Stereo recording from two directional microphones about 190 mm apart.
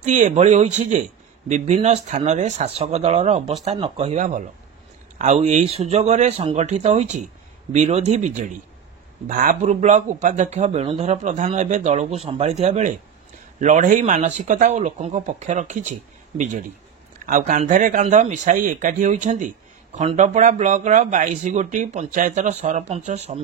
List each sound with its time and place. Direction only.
0.0 s speech: 40° right (ahead or behind)